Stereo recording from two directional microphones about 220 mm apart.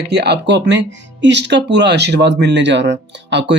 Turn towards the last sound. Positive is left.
turn(degrees=-55)  # may be behind; listen again after turning